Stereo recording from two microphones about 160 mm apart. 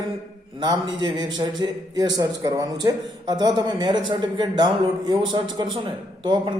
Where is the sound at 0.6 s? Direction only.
25° right (ahead or behind).